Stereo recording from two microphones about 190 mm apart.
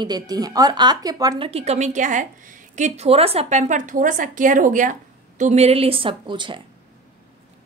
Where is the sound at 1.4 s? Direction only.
35° right (ahead or behind).